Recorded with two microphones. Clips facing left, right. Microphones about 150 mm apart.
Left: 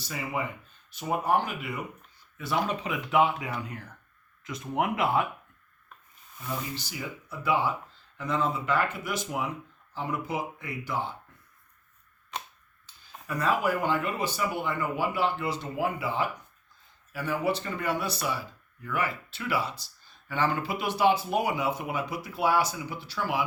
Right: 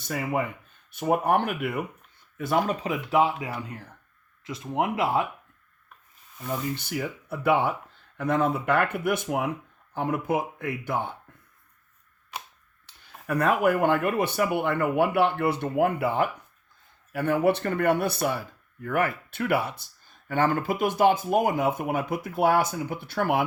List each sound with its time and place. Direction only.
0.0 s speech: 55° right (ahead or behind)
2.4 s speech: 45° right (ahead or behind); by 5.2 s 30° right (ahead or behind)
6.7 s speech: 60° right (ahead or behind)
12.8 s speech: 70° right (ahead or behind)